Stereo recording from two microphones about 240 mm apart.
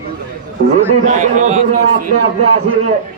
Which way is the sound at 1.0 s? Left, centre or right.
Right.